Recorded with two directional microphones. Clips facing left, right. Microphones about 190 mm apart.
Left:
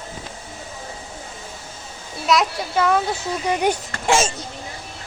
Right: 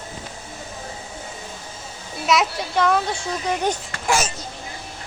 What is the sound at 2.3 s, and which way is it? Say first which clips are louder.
A child's voice: left 1 dB; centre (ahead or behind).